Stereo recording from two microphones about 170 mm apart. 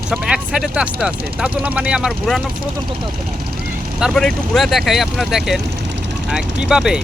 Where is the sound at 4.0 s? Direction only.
5° left (ahead or behind).